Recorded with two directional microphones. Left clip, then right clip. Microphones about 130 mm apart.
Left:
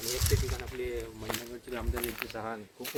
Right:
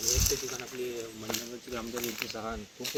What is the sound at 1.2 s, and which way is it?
Speech, 75° right (ahead or behind).